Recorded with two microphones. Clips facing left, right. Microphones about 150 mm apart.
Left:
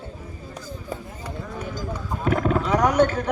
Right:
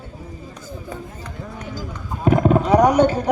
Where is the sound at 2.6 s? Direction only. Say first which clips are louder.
Right 6 dB; 35° right (ahead or behind).